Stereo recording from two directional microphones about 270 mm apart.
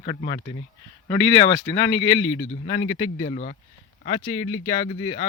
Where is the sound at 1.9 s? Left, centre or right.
Left.